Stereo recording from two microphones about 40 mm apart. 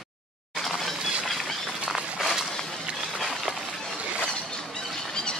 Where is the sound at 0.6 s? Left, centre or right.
Centre.